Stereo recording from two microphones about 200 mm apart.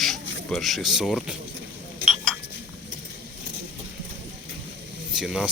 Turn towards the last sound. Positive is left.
turn(degrees=0)  # may be behind; listen again after turning